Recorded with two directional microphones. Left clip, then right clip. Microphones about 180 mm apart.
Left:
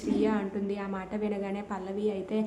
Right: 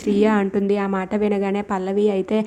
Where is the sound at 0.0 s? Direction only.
40° right (ahead or behind).